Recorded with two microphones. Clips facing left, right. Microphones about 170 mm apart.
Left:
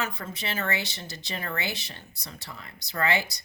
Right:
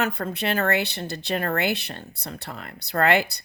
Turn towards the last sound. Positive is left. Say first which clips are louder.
# right 7 dB
turn(degrees=-60)  # may be behind; listen again after turning